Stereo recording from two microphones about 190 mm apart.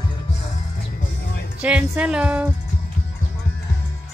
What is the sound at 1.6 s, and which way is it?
Speech, 5° right (ahead or behind).